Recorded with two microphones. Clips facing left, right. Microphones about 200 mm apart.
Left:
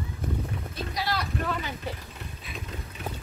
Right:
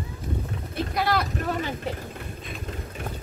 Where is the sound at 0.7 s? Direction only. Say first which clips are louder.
Right 8 dB; 55° right (ahead or behind).